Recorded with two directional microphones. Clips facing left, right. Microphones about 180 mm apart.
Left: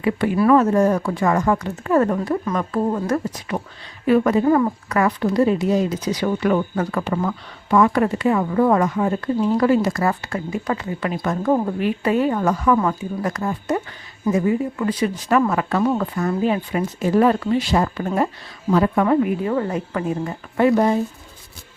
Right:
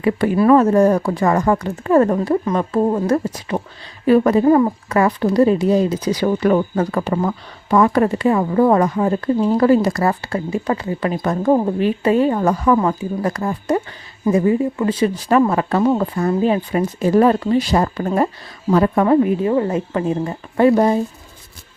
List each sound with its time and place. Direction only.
0.0 s speech: 40° right (ahead or behind)
11.4 s speech: 25° right (ahead or behind)